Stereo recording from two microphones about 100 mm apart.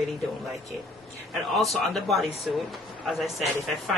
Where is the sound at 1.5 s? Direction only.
Centre (ahead or behind).